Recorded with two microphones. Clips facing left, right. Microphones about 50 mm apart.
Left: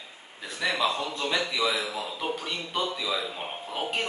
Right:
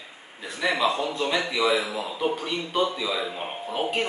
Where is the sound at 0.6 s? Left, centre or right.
Right.